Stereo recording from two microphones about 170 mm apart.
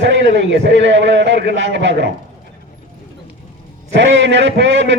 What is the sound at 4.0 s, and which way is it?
A man's voice, 90° right.